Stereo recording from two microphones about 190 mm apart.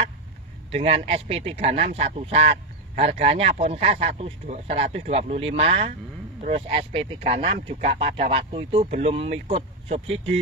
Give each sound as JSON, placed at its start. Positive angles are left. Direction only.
{"t": 0.7, "sound": "speech", "side_deg": -30}